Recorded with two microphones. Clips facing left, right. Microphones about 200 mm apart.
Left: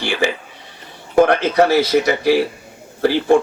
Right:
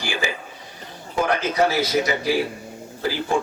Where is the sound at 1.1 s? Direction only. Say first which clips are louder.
Left 9 dB; 65° left (ahead or behind).